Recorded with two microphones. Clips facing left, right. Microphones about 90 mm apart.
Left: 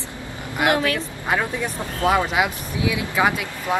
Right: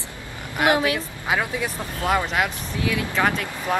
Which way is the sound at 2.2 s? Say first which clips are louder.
Left 2 dB; 15° left (ahead or behind).